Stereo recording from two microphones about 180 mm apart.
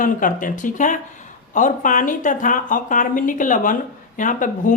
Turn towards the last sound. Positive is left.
turn(degrees=45)  # may be behind; listen again after turning